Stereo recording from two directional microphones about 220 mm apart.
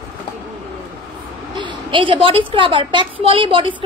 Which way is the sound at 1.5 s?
20° right (ahead or behind).